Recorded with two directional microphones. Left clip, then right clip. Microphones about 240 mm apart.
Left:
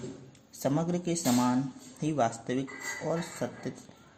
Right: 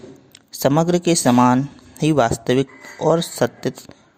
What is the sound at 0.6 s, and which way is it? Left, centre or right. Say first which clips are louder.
Speech: right 14 dB; right.